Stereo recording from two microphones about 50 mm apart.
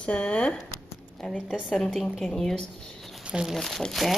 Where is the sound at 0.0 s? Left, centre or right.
Left.